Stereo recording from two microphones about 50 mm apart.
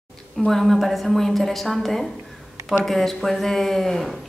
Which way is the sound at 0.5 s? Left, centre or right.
Centre.